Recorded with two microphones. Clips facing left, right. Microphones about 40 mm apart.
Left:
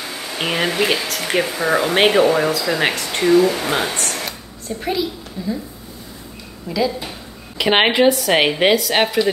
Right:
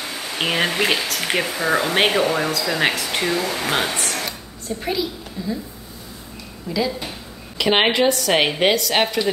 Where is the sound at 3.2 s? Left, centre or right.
Centre.